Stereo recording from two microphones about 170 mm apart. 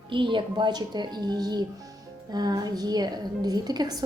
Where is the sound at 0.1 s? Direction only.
30° right (ahead or behind).